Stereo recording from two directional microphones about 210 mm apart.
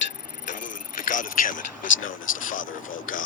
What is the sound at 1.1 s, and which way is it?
Speech, 40° left (ahead or behind).